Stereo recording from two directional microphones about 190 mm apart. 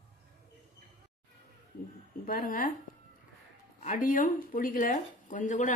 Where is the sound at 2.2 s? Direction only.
50° left (ahead or behind).